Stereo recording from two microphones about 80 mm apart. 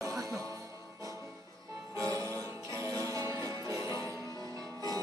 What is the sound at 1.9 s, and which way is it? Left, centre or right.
Music, right.